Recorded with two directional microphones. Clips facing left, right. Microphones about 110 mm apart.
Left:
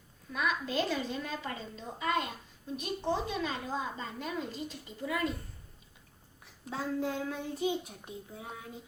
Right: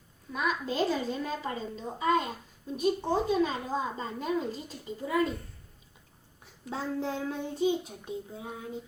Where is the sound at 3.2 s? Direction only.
30° right (ahead or behind).